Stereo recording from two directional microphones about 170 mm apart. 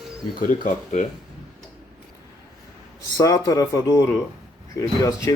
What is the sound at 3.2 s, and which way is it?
Speech, 20° left (ahead or behind).